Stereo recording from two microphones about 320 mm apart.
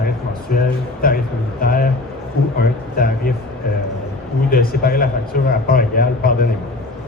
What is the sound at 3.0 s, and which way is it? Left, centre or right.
Speech, left.